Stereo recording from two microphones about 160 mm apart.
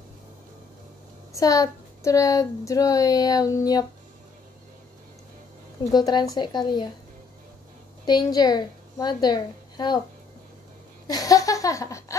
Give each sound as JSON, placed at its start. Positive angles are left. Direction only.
{"t": 1.3, "sound": "speech", "side_deg": 20}
{"t": 5.9, "sound": "speech", "side_deg": 25}
{"t": 8.0, "sound": "a woman's voice", "side_deg": 25}
{"t": 11.1, "sound": "a sound", "side_deg": 20}